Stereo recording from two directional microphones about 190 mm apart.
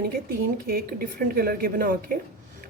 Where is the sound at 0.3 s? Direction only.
50° right (ahead or behind).